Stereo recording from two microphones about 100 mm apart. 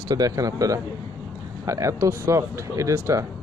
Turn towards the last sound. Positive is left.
turn(degrees=-30)  # may be behind; listen again after turning